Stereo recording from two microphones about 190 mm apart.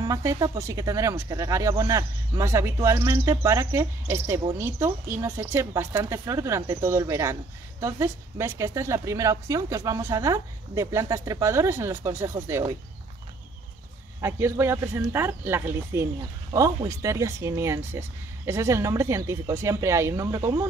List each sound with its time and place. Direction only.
0.0 s speech: 15° right (ahead or behind)
14.2 s speech: 15° right (ahead or behind)